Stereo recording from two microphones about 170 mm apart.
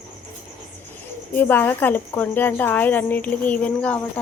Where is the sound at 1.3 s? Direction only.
10° left (ahead or behind).